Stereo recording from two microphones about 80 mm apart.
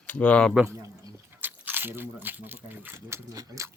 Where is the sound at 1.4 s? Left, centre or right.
Right.